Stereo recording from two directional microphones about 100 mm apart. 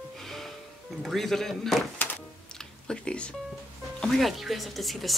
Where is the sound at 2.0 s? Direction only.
20° left (ahead or behind).